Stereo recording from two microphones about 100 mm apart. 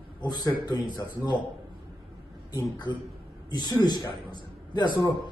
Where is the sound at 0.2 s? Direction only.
45° left (ahead or behind).